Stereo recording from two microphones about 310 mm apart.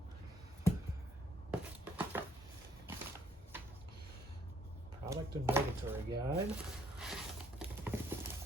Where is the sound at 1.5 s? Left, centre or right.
Centre.